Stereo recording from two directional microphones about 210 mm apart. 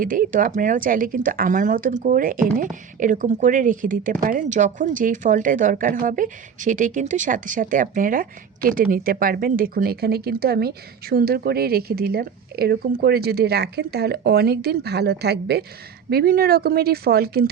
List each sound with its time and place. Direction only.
0.0 s a woman's voice: 40° right (ahead or behind)